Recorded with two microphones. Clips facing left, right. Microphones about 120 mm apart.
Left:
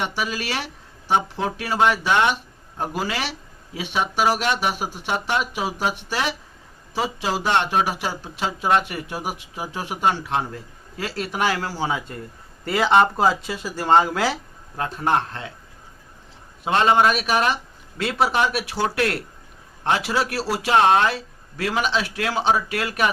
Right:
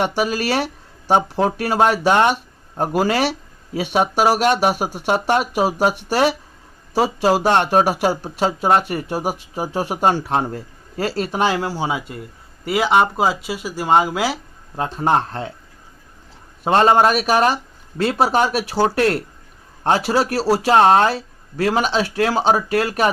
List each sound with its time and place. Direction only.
0.0 s speech: 45° right (ahead or behind); by 14.3 s 5° right (ahead or behind)
14.8 s speech: 30° right (ahead or behind)
16.6 s speech: 40° right (ahead or behind)